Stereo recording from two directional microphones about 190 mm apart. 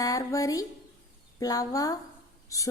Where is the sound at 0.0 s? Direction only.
15° left (ahead or behind).